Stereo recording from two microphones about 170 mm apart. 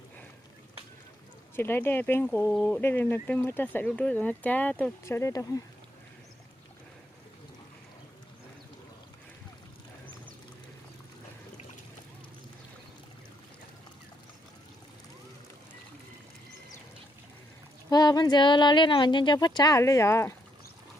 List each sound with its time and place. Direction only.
1.5 s speech: 15° left (ahead or behind)
17.8 s speech: 20° left (ahead or behind)